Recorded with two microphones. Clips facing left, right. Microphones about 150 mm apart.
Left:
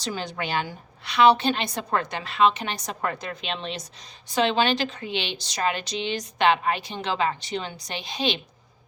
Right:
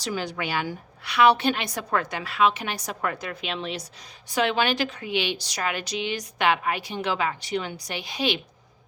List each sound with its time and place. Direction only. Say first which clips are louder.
0.0 s a woman's voice: right 1 dB; 10° right (ahead or behind)